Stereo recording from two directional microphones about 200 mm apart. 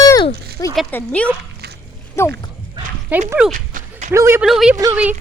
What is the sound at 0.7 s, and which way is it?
A child's voice, 5° left (ahead or behind).